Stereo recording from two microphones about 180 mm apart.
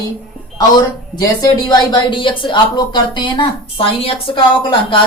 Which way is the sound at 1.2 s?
20° left (ahead or behind).